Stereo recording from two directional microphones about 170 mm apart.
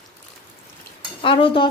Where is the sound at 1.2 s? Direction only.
30° left (ahead or behind).